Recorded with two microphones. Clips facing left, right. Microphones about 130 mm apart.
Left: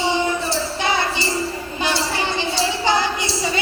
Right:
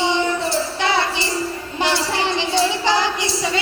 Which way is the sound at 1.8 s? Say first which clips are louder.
Right 2 dB; 90° right.